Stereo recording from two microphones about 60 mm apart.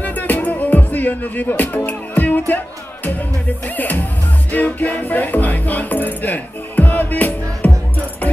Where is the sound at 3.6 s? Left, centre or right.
Left.